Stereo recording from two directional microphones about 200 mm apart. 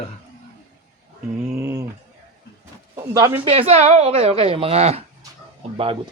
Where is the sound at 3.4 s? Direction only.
30° right (ahead or behind).